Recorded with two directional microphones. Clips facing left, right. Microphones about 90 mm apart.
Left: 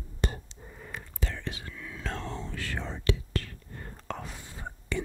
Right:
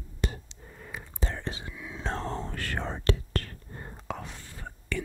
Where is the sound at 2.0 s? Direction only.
30° right (ahead or behind).